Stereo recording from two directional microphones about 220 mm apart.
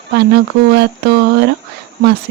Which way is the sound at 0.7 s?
50° right (ahead or behind).